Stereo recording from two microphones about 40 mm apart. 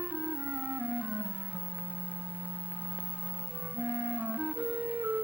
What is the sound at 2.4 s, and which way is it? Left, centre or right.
Clarinet, right.